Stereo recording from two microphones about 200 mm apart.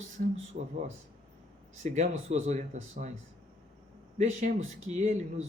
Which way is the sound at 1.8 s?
35° right (ahead or behind).